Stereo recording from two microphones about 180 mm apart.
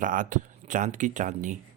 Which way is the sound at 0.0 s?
45° right (ahead or behind).